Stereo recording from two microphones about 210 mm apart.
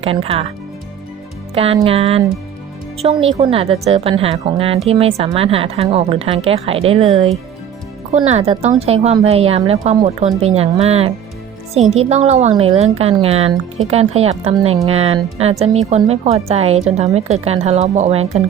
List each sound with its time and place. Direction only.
0.0 s a woman's voice: 25° right (ahead or behind)
1.5 s a woman's voice: 25° right (ahead or behind)
3.3 s a woman's voice: 30° right (ahead or behind)